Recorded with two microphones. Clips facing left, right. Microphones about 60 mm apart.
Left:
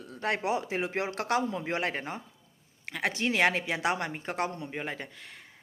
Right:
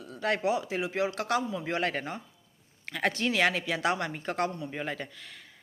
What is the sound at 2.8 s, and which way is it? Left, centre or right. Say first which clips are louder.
Speech: right 2 dB; centre.